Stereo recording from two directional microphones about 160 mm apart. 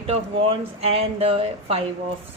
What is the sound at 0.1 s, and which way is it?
Speech, 40° right (ahead or behind).